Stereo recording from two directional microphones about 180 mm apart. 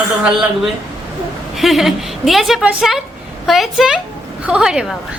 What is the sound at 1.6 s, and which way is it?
A woman's voice, centre (ahead or behind).